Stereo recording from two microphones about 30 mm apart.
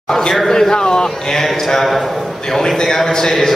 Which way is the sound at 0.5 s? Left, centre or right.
Left.